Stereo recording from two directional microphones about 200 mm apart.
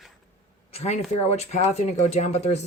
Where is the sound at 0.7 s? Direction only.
30° left (ahead or behind).